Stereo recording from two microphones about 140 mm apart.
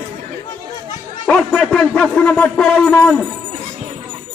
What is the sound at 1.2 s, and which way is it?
A man's voice, 5° left (ahead or behind).